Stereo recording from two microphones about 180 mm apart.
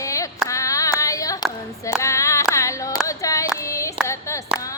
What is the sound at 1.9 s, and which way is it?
Clapping, 15° left (ahead or behind).